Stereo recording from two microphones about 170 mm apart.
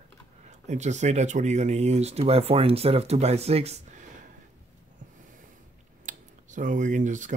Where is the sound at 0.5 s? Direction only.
45° right (ahead or behind).